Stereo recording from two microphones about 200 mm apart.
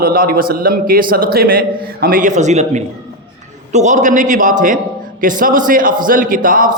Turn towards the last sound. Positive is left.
turn(degrees=-45)  # may be behind; listen again after turning